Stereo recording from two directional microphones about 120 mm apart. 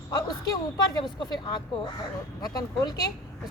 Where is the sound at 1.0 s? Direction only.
40° left (ahead or behind).